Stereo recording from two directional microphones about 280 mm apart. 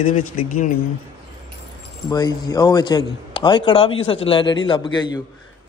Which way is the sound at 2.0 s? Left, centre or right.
Centre.